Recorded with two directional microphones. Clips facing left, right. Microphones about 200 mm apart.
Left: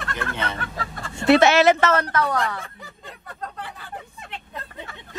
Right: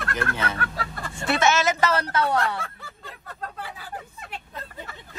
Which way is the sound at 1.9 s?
30° right (ahead or behind).